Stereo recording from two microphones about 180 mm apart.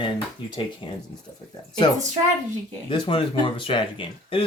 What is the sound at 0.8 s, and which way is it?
Speech, 25° left (ahead or behind).